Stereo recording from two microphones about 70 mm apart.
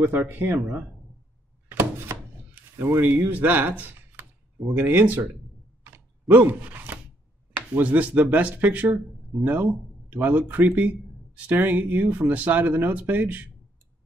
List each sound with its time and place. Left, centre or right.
0.0 s speech: right
1.7 s thunk: right
2.8 s speech: right
6.2 s speech: right